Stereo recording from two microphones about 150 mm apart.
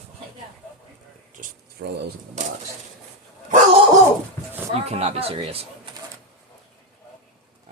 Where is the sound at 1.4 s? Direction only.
60° right (ahead or behind).